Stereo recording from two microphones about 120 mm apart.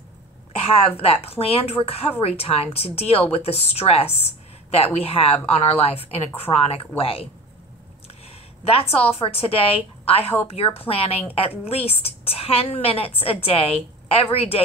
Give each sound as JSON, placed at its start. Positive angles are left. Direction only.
{"t": 0.7, "sound": "a woman's voice", "side_deg": 55}
{"t": 8.6, "sound": "a woman's voice", "side_deg": 55}